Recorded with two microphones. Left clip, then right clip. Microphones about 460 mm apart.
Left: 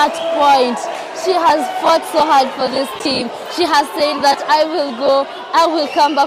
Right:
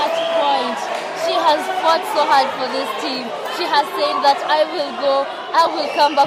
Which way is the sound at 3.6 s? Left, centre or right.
Left.